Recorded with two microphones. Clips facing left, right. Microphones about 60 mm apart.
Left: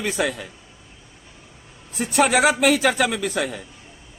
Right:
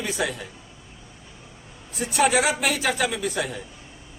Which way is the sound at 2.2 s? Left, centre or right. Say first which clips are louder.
Left 4 dB; left.